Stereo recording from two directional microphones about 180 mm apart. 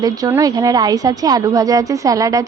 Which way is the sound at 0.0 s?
20° right (ahead or behind).